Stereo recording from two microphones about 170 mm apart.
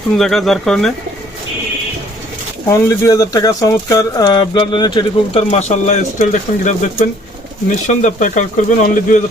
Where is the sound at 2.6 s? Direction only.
20° left (ahead or behind).